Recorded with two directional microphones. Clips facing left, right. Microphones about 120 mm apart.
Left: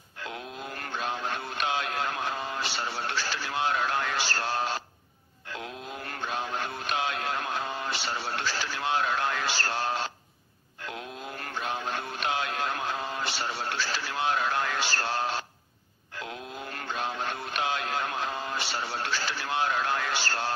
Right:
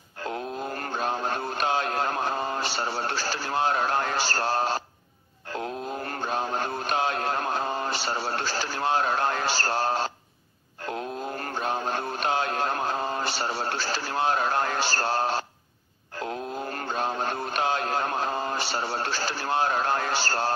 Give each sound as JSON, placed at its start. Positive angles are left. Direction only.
{"t": 0.2, "sound": "mantra", "side_deg": -40}